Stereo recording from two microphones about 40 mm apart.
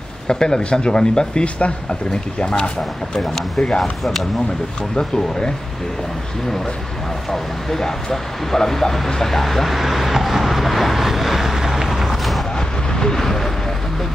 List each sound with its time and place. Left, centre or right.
0.3 s speech: centre
3.2 s speech: centre
4.0 s speech: centre
4.9 s speech: centre
7.2 s speech: centre
12.5 s vehicle: centre